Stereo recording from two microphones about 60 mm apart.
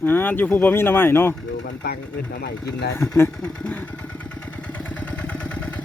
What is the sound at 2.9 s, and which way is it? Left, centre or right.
Speech, left.